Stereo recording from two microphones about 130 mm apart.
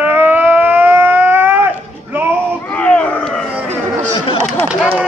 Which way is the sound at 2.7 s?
10° left (ahead or behind).